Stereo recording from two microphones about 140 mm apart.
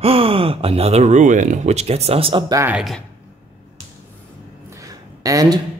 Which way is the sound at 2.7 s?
Centre (ahead or behind).